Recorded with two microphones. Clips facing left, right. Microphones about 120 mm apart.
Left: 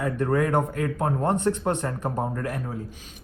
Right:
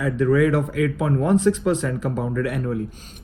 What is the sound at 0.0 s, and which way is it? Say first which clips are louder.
A man's voice: right 5 dB; 90° right.